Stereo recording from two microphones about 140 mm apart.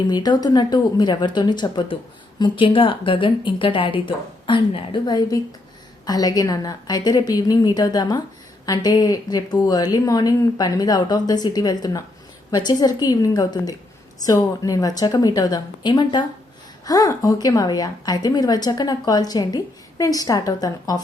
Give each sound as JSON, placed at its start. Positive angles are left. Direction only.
{"t": 0.1, "sound": "a woman's voice", "side_deg": 30}